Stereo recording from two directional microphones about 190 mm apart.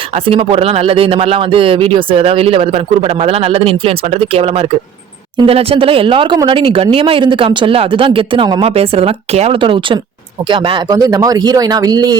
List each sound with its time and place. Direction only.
0.1 s speech: 30° right (ahead or behind)